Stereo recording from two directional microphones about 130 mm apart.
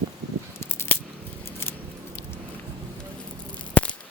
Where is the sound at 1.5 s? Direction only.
20° left (ahead or behind).